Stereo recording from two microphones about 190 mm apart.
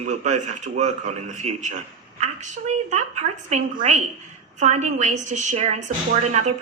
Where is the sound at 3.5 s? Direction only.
40° right (ahead or behind).